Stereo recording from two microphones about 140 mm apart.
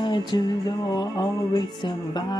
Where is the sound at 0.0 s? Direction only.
35° left (ahead or behind).